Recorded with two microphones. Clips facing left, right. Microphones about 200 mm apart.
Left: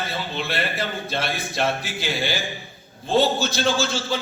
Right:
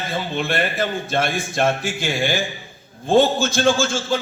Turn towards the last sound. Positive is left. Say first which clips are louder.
# right 4 dB
turn(degrees=-50)  # may be behind; listen again after turning